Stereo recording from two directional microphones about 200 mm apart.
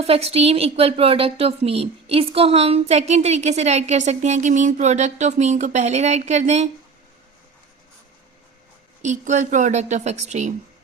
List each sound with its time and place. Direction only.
0.0 s a woman's voice: 30° right (ahead or behind)
9.0 s a woman's voice: 35° right (ahead or behind)